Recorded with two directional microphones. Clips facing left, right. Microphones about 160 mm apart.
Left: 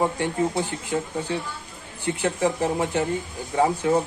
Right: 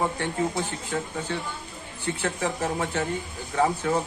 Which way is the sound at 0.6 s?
15° left (ahead or behind).